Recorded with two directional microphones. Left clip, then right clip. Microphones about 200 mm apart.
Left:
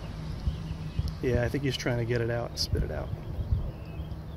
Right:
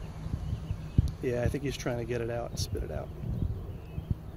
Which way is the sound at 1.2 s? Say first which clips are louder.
Left 3 dB; 5° right (ahead or behind).